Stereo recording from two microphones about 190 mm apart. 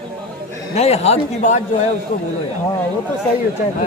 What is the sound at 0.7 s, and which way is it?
Speech, 35° left (ahead or behind).